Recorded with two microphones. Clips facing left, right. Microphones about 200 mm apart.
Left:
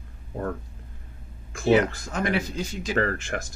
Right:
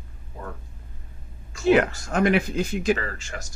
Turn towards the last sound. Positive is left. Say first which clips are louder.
# left 7 dB
turn(degrees=55)  # may be behind; listen again after turning